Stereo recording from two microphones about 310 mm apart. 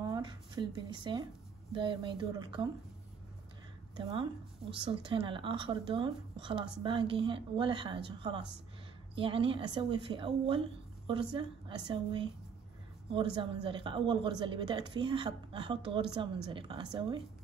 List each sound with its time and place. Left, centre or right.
0.0 s a sound: centre
1.7 s speech: centre
4.0 s speech: centre
11.9 s speech: centre